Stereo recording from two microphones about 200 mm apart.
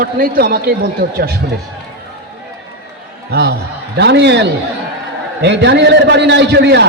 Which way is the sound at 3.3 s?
60° right (ahead or behind).